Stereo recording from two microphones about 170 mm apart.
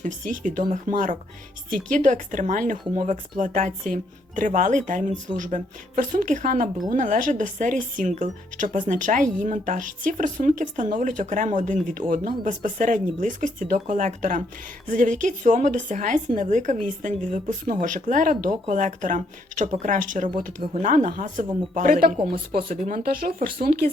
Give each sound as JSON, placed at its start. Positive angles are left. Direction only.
{"t": 0.0, "sound": "speech", "side_deg": -50}